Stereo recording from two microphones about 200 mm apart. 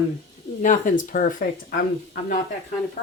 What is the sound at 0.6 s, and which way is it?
Speech, 40° left (ahead or behind).